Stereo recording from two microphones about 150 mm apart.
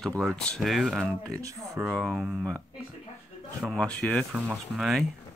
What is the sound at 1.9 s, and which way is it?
Speech, centre (ahead or behind).